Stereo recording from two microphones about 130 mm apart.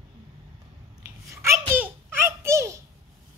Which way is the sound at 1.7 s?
15° right (ahead or behind).